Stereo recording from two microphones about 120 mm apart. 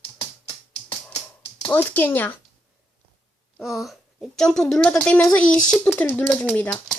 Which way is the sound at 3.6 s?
Centre (ahead or behind).